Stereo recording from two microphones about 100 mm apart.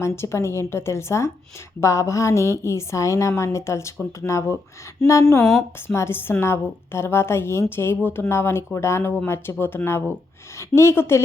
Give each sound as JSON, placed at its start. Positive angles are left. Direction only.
{"t": 0.0, "sound": "a woman's voice", "side_deg": 30}
{"t": 5.5, "sound": "a woman's voice", "side_deg": 25}